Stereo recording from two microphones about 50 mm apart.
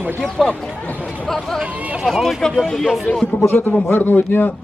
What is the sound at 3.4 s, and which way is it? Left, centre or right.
A man's voice, left.